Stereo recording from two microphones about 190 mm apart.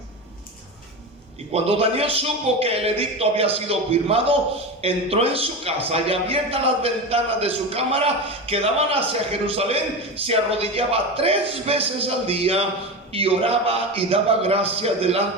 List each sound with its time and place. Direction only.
1.5 s a man's voice: 30° right (ahead or behind)